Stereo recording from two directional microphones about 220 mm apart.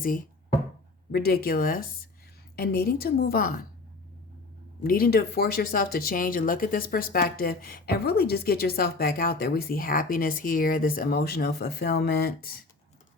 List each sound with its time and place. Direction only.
1.1 s speech: 45° left (ahead or behind)
4.8 s speech: 40° left (ahead or behind)